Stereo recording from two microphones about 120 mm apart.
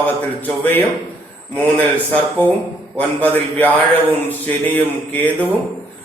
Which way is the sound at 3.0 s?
15° left (ahead or behind).